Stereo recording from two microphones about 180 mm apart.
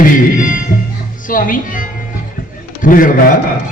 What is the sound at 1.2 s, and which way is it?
A man's voice, 50° left (ahead or behind).